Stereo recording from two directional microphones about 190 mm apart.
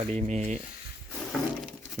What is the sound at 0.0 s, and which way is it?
Speech, 35° right (ahead or behind).